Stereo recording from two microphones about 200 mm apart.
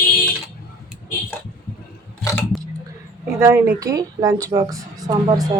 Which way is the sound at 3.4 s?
10° right (ahead or behind).